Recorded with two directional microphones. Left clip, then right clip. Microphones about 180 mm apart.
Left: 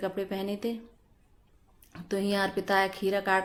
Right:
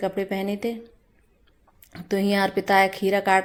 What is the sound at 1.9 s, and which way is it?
A woman's voice, 25° right (ahead or behind).